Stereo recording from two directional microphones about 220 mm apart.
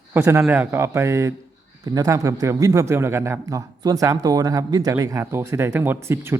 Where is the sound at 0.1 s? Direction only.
10° right (ahead or behind).